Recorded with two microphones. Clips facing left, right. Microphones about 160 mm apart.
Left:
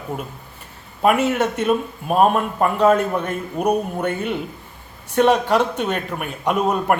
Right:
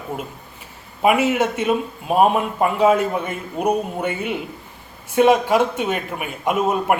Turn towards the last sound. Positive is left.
turn(degrees=-5)  # may be behind; listen again after turning